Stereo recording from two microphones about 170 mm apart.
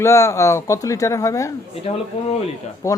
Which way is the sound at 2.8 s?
20° left (ahead or behind).